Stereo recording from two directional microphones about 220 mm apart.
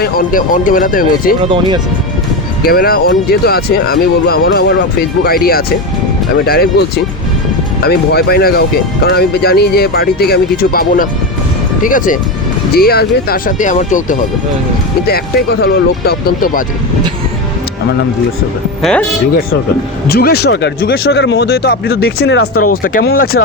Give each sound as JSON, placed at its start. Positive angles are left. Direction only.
{"t": 0.0, "sound": "speech", "side_deg": 40}
{"t": 2.6, "sound": "speech", "side_deg": 45}
{"t": 15.6, "sound": "speech", "side_deg": 45}
{"t": 18.8, "sound": "speech", "side_deg": 5}
{"t": 20.1, "sound": "speech", "side_deg": 45}